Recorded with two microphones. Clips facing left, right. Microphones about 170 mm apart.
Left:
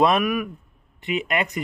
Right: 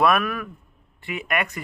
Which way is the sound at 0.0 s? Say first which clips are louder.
Left 2 dB; 20° left (ahead or behind).